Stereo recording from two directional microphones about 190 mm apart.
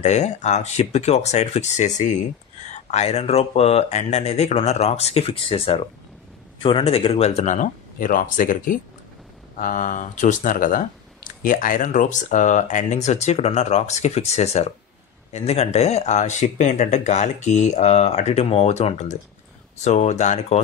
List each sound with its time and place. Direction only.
0.0 s speech: 35° left (ahead or behind)